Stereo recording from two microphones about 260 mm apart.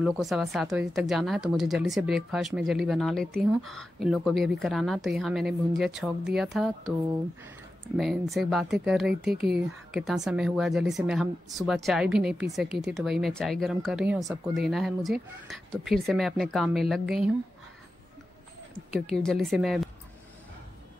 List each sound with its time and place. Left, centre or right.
0.0 s a woman's voice: centre
8.0 s a woman's voice: centre
9.3 s speech: right
9.9 s a woman's voice: centre
19.1 s a woman's voice: centre